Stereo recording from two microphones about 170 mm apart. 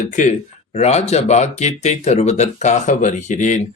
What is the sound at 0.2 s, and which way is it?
Speech, 45° left (ahead or behind).